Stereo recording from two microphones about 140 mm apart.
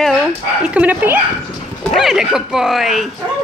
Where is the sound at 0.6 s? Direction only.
10° right (ahead or behind).